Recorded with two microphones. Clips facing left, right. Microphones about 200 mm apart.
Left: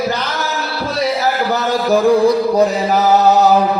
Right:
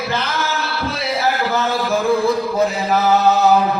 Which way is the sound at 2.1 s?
40° left (ahead or behind).